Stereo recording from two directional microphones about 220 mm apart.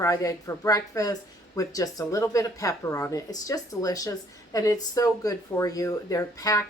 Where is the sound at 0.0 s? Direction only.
15° left (ahead or behind).